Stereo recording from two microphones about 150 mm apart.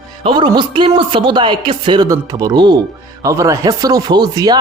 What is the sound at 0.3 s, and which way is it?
Speech, 30° right (ahead or behind).